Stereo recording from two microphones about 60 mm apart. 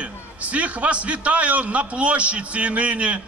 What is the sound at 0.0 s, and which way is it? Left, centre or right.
A man's voice, right.